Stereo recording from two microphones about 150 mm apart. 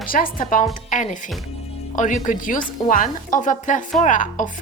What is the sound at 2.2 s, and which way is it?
Speech, 60° left (ahead or behind).